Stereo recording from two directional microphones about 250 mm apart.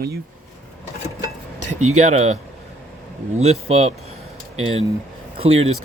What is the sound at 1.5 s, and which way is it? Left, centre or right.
Cutlery, right.